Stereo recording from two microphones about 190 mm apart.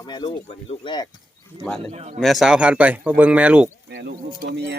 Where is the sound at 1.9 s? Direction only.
35° right (ahead or behind).